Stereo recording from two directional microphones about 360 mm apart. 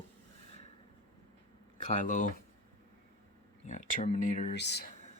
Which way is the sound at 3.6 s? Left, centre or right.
Centre.